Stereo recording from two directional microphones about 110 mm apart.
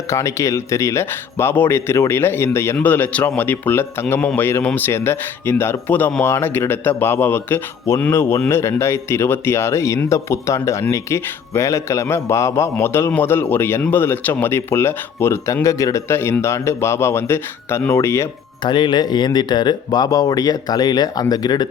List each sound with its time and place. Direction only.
0.1 s speech: 30° left (ahead or behind)
18.6 s speech: 45° left (ahead or behind)